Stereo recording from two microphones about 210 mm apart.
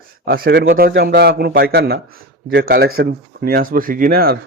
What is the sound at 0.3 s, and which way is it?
Speech, 45° right (ahead or behind).